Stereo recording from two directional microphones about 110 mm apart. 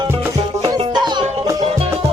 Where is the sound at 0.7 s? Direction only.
40° right (ahead or behind).